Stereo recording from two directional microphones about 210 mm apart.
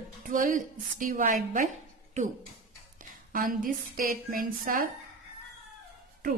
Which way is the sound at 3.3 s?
40° right (ahead or behind).